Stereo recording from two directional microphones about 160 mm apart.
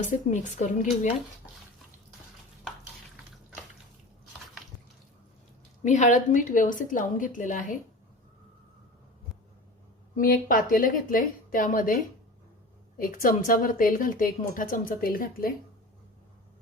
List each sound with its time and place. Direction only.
0.0 s a woman's voice: 50° left (ahead or behind)
5.8 s a woman's voice: 50° left (ahead or behind)
10.2 s a woman's voice: 60° left (ahead or behind)
13.0 s a woman's voice: 60° left (ahead or behind)